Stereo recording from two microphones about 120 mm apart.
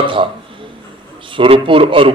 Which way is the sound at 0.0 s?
45° right (ahead or behind).